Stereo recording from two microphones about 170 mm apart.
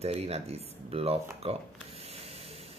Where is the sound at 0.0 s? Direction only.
40° right (ahead or behind).